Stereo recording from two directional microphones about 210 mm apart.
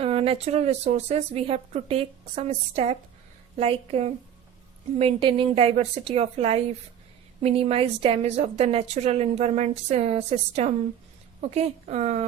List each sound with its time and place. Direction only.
0.0 s a woman's voice: 25° right (ahead or behind)